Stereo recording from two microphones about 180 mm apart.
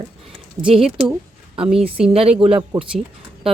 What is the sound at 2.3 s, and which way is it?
Speech, 30° right (ahead or behind).